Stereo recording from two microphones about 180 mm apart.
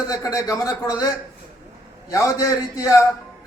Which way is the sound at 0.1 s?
20° left (ahead or behind).